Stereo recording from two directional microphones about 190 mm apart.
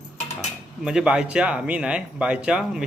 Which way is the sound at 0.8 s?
5° right (ahead or behind).